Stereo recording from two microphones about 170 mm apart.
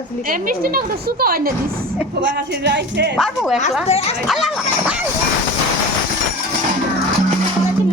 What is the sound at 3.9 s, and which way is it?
Speech, 40° left (ahead or behind).